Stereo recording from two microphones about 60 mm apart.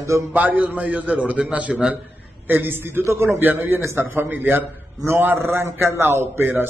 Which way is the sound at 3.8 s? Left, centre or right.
Right.